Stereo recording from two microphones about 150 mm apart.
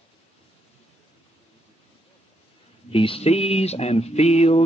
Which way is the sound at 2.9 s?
40° left (ahead or behind).